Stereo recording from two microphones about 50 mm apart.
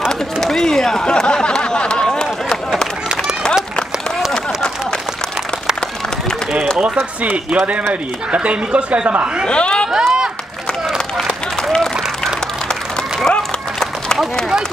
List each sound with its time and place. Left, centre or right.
0.4 s a sound: centre
7.0 s speech: right
7.9 s speech: right
9.5 s a sound: centre
9.9 s run: centre
13.3 s run: centre